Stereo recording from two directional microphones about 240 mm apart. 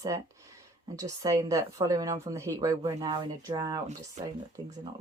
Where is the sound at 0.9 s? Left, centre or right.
Centre.